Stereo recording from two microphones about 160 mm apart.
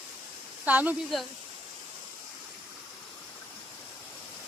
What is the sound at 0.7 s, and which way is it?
Speech, 10° right (ahead or behind).